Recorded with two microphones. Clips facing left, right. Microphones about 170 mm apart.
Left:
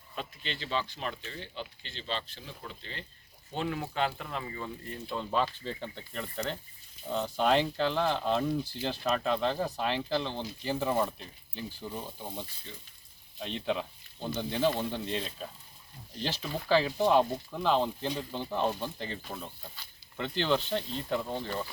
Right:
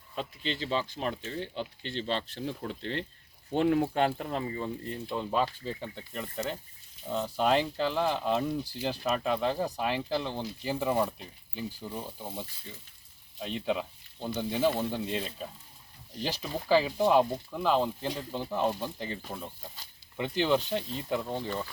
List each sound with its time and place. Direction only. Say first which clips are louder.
0.2 s speech: right 5 dB; 35° right (ahead or behind); by 3.1 s 60° right (ahead or behind)
3.5 s speech: right 8 dB; 50° right (ahead or behind); by 4.9 s 25° right (ahead or behind)
5.0 s speech: right 1 dB; 15° right (ahead or behind)